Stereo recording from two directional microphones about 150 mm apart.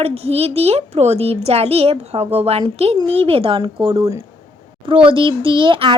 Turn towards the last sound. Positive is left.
turn(degrees=-35)  # may be behind; listen again after turning